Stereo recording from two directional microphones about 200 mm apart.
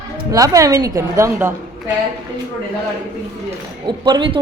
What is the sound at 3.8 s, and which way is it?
Speech, 25° right (ahead or behind).